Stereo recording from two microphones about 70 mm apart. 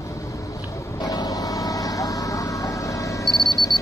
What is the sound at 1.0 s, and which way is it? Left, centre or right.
Vehicle, left.